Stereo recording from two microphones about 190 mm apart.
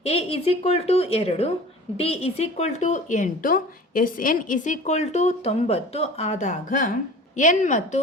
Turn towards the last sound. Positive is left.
turn(degrees=40)  # may be behind; listen again after turning